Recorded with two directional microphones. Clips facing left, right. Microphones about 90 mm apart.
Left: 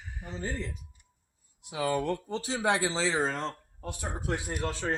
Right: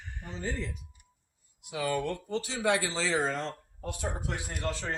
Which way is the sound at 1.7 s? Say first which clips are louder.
Left 2 dB; 30° left (ahead or behind).